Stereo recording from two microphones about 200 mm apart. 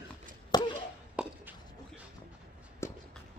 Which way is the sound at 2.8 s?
15° left (ahead or behind).